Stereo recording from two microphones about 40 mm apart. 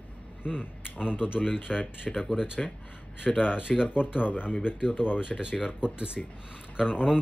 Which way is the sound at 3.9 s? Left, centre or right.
Left.